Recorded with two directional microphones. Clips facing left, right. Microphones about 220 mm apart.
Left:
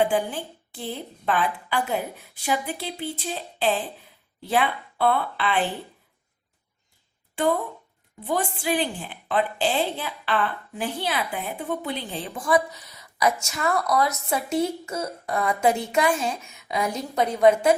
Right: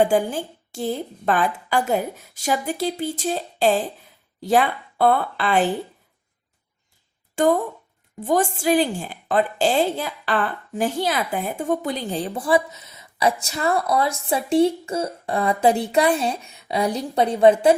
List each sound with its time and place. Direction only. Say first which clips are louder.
0.0 s a woman's voice: right 4 dB; 45° right (ahead or behind)
7.3 s a woman's voice: right 5 dB; 45° right (ahead or behind)